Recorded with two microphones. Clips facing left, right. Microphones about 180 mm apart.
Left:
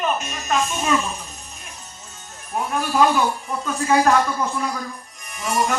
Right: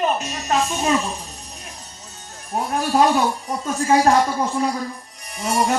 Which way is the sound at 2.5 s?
35° right (ahead or behind).